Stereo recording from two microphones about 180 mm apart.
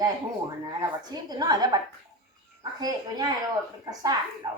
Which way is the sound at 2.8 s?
20° right (ahead or behind).